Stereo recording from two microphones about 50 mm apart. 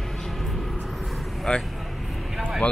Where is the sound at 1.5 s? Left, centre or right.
Centre.